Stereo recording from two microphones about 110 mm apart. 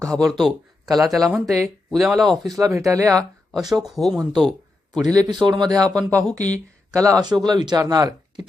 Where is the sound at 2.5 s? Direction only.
30° right (ahead or behind).